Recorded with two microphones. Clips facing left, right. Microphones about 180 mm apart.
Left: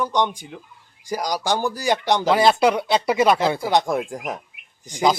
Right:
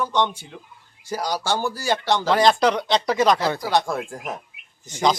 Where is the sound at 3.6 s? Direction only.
20° left (ahead or behind).